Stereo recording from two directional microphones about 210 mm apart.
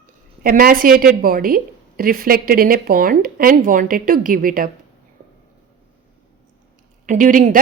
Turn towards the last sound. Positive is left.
turn(degrees=-40)  # may be behind; listen again after turning